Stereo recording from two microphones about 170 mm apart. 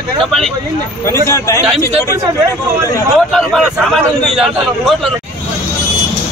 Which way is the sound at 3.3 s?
Centre (ahead or behind).